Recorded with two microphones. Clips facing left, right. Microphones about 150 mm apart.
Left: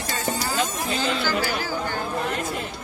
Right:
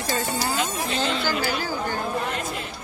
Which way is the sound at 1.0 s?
Centre (ahead or behind).